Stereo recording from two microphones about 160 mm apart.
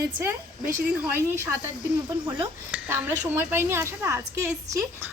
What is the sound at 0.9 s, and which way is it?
A woman's voice, 10° right (ahead or behind).